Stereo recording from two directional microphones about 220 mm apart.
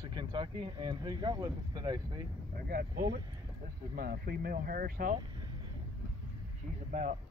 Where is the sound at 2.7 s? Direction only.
45° right (ahead or behind).